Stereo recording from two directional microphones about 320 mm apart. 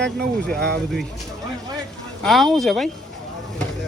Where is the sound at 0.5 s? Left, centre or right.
Right.